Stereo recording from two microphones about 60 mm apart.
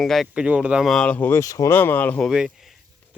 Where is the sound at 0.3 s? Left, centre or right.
Centre.